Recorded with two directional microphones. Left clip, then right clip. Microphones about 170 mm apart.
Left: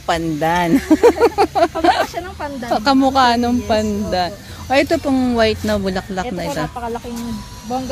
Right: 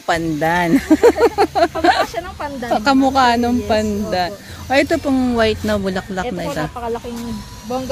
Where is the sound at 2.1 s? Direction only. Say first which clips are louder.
Right 1 dB; 60° right (ahead or behind).